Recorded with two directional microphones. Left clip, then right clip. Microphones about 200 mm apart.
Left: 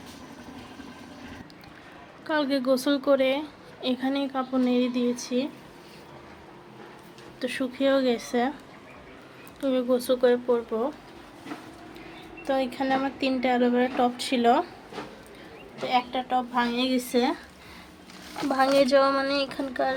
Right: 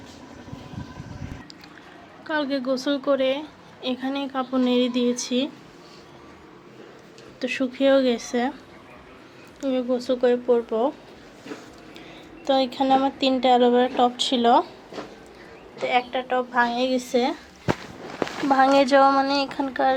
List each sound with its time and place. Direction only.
2.2 s a woman's voice: 5° left (ahead or behind); by 5.5 s 15° right (ahead or behind)
7.3 s speech: 10° right (ahead or behind)
9.6 s a woman's voice: 5° left (ahead or behind)
12.5 s speech: 15° right (ahead or behind)
15.9 s a woman's voice: centre (ahead or behind)
18.4 s speech: 5° right (ahead or behind)